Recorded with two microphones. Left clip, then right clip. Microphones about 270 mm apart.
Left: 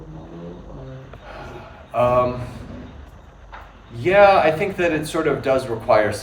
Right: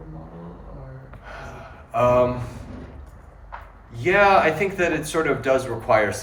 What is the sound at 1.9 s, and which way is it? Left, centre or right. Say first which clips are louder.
Speech: left 1 dB; centre.